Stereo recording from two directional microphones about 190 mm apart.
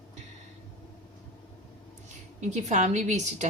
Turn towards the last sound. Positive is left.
turn(degrees=-40)  # may be behind; listen again after turning